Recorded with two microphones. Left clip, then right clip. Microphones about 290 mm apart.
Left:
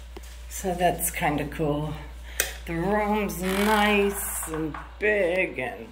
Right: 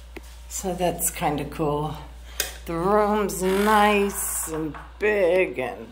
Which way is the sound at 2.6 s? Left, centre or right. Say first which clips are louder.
Right 6 dB; right.